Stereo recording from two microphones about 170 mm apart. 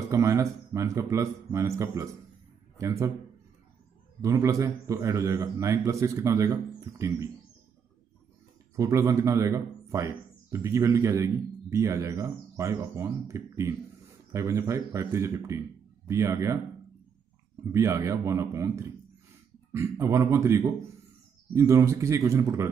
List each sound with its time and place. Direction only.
0.1 s a man's voice: 20° right (ahead or behind)
4.2 s a man's voice: 20° right (ahead or behind)
8.7 s speech: 20° right (ahead or behind)
17.6 s speech: 20° right (ahead or behind)